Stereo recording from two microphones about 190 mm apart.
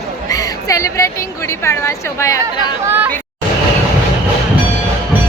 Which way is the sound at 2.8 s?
10° right (ahead or behind).